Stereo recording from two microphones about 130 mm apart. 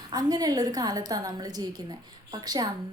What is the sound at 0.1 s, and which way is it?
A woman's voice, 30° right (ahead or behind).